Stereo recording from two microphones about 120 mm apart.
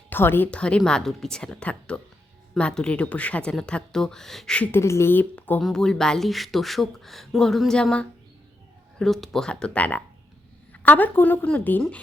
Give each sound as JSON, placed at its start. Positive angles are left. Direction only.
{"t": 0.1, "sound": "a woman's voice", "side_deg": 15}
{"t": 4.7, "sound": "a woman's voice", "side_deg": 25}